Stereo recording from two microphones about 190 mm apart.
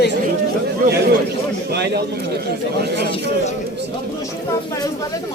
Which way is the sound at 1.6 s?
60° right (ahead or behind).